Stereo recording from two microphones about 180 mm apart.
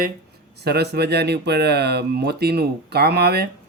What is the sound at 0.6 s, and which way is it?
Speech, 65° right (ahead or behind).